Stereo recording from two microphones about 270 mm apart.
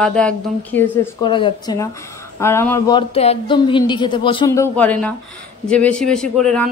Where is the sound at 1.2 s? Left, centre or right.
Centre.